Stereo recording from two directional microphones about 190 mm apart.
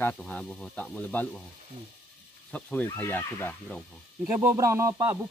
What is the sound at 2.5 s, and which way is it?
Speech, 10° left (ahead or behind).